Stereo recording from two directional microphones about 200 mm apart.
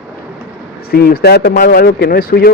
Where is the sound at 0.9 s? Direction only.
50° left (ahead or behind).